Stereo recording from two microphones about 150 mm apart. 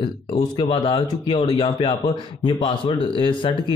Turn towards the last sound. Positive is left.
turn(degrees=35)  # may be behind; listen again after turning